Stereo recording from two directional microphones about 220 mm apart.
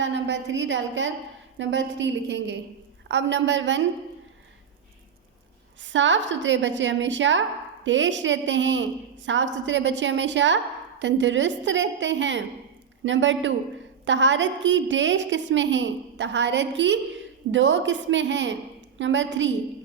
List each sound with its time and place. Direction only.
0.0 s a woman's voice: 55° right (ahead or behind)
5.8 s a woman's voice: 55° right (ahead or behind)